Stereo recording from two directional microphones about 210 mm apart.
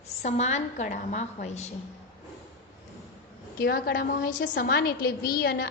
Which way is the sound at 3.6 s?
45° left (ahead or behind).